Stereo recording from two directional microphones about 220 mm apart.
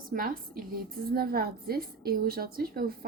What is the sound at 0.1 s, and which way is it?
A woman's voice, 40° right (ahead or behind).